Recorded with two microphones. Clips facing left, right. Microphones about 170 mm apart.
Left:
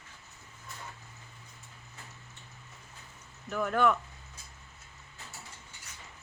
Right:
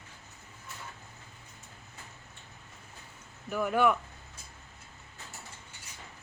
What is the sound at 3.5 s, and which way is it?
Speech, 10° right (ahead or behind).